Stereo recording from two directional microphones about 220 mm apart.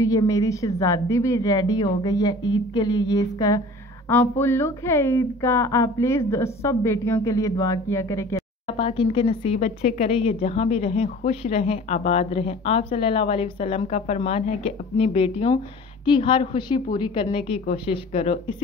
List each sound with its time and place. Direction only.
0.0 s a woman's voice: 15° left (ahead or behind)
8.6 s a woman's voice: 25° left (ahead or behind)